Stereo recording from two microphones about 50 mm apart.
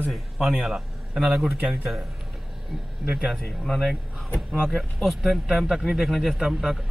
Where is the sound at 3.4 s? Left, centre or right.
Centre.